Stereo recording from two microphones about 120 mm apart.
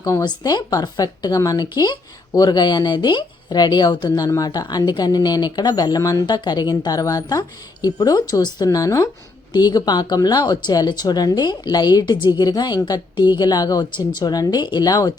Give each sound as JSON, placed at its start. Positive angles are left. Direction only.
{"t": 0.0, "sound": "speech", "side_deg": 30}